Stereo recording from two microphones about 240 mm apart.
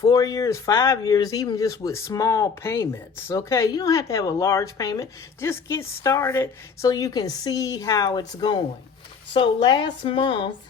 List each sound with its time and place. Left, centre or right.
0.0 s speech: centre